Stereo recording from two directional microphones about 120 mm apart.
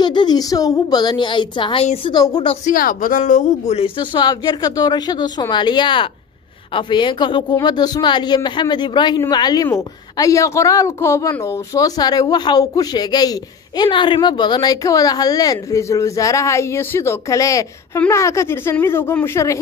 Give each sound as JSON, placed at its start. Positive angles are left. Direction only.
{"t": 0.0, "sound": "speech", "side_deg": 40}
{"t": 2.6, "sound": "speech", "side_deg": 90}